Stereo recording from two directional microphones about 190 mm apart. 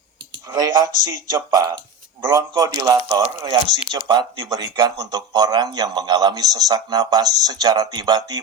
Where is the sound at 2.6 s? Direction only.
20° right (ahead or behind).